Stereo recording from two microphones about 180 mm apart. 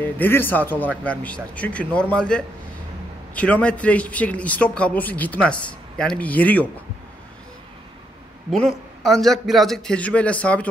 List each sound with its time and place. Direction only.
0.0 s a man's voice: 10° left (ahead or behind)
8.5 s a man's voice: centre (ahead or behind)